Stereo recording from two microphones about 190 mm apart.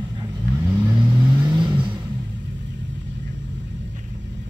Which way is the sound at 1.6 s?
25° right (ahead or behind).